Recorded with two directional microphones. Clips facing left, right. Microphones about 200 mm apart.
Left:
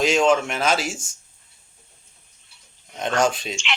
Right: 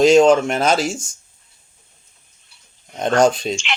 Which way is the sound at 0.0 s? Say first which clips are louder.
Right 7 dB; 40° right (ahead or behind).